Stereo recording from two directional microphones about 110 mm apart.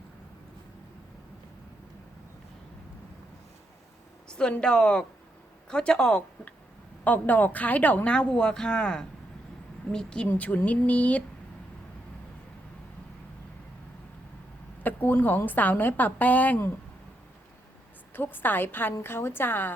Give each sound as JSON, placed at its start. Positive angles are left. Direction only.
{"t": 4.3, "sound": "speech", "side_deg": 10}
{"t": 14.8, "sound": "speech", "side_deg": 15}
{"t": 18.1, "sound": "a woman's voice", "side_deg": 20}